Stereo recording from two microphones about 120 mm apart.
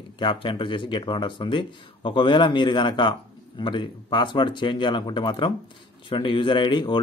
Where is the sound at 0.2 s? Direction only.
45° left (ahead or behind).